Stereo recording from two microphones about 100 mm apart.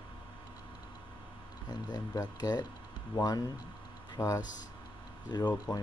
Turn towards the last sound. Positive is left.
turn(degrees=45)  # may be behind; listen again after turning